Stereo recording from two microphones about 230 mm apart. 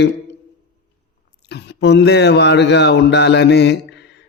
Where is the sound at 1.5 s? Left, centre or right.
Left.